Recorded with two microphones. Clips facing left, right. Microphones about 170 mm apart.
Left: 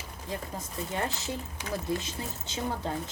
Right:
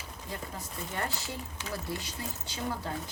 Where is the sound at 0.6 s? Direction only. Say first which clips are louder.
Left 3 dB; 20° left (ahead or behind).